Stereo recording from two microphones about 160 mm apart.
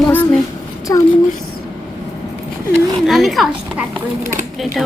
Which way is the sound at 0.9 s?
20° left (ahead or behind).